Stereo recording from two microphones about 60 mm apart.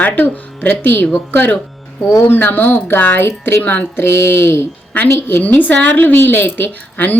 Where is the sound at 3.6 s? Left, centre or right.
Left.